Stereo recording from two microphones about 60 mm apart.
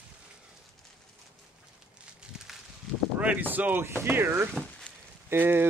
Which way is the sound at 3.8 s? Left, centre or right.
Right.